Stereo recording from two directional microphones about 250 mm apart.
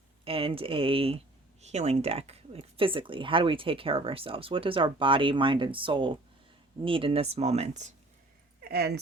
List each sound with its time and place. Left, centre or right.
0.3 s speech: right
8.6 s speech: right